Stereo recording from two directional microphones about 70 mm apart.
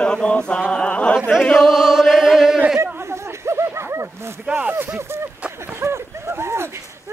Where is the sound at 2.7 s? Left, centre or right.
Right.